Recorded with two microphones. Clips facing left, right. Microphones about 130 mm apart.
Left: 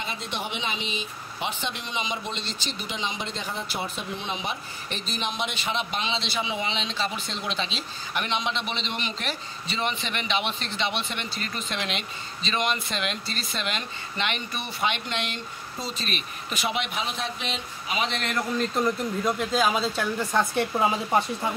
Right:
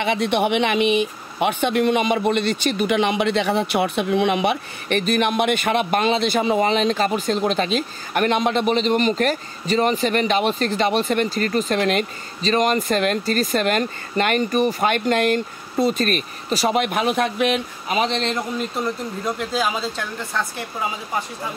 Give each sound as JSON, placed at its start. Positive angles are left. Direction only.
{"t": 0.0, "sound": "speech", "side_deg": -75}
{"t": 16.4, "sound": "speech", "side_deg": -40}
{"t": 18.8, "sound": "speech", "side_deg": -5}
{"t": 20.3, "sound": "speech", "side_deg": 15}